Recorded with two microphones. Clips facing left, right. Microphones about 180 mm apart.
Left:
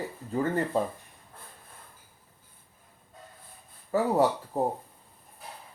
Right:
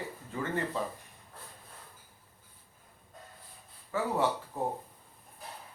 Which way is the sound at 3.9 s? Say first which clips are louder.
Left 6 dB; 40° left (ahead or behind).